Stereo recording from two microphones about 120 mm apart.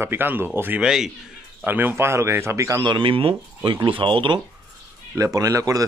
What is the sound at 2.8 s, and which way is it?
Speech, 45° right (ahead or behind).